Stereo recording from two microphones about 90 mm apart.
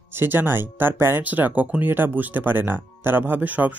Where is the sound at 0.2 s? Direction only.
25° right (ahead or behind).